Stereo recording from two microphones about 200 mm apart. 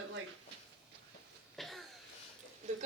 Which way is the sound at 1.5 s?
Centre (ahead or behind).